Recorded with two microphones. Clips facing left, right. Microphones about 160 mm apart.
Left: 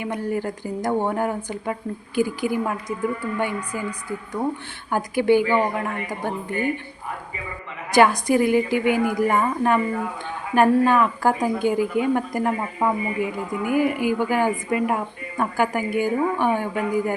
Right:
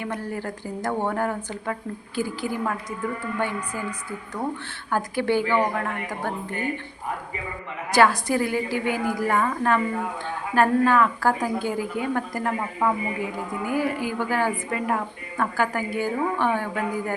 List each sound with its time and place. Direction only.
0.0 s speech: 15° left (ahead or behind)
4.9 s speech: 15° left (ahead or behind)
7.9 s speech: 15° left (ahead or behind)